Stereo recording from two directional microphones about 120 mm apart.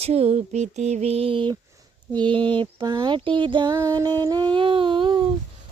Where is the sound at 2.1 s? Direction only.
45° right (ahead or behind).